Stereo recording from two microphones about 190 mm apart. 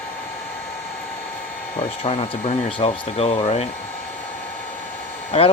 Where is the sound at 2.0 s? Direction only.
30° left (ahead or behind).